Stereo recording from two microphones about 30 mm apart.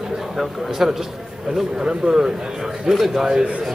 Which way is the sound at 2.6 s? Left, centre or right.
Centre.